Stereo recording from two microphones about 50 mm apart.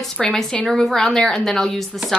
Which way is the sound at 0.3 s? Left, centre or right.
Centre.